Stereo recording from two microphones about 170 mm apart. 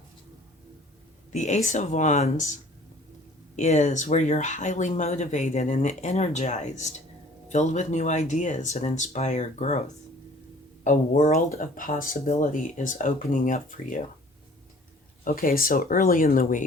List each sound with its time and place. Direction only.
1.3 s speech: 45° left (ahead or behind)
15.2 s speech: 55° left (ahead or behind)